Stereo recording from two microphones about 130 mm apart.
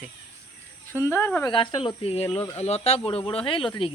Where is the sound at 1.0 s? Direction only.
15° left (ahead or behind).